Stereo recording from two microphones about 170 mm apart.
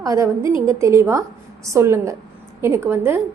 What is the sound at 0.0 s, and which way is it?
A woman's voice, 20° right (ahead or behind).